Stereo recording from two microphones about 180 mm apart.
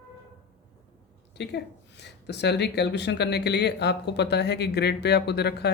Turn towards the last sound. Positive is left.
turn(degrees=65)  # may be behind; listen again after turning